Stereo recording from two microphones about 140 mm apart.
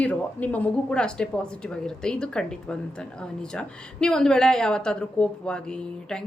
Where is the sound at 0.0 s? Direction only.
10° left (ahead or behind).